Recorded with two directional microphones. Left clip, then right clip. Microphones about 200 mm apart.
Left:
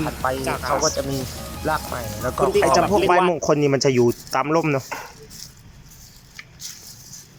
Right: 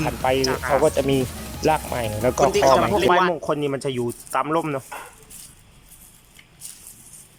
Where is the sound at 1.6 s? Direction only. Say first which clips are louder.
Right 4 dB; 30° right (ahead or behind).